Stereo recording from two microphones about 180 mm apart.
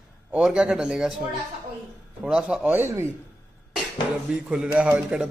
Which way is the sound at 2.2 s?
5° right (ahead or behind).